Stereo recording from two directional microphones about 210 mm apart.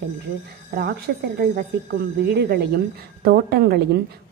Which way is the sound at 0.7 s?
50° right (ahead or behind).